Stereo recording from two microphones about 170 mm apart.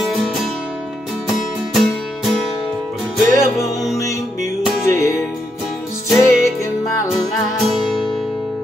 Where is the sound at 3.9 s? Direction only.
20° left (ahead or behind).